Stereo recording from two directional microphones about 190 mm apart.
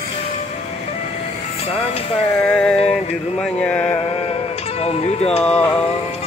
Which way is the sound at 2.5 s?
5° left (ahead or behind).